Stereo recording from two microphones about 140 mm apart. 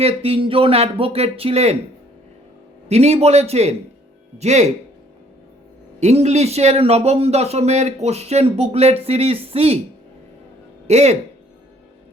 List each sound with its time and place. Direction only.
0.0 s speech: 45° right (ahead or behind)
2.9 s speech: 50° right (ahead or behind)
6.0 s speech: 50° right (ahead or behind)
10.8 s speech: 50° right (ahead or behind)